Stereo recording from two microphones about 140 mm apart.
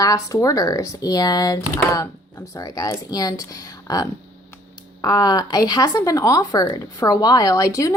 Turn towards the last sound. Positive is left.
turn(degrees=25)  # may be behind; listen again after turning